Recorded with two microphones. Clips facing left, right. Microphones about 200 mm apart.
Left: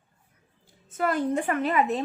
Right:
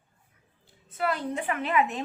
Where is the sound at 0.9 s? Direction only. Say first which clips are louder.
Left 4 dB; 45° left (ahead or behind).